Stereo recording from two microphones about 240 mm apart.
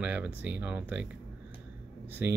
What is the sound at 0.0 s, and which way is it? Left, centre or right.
Speech, centre.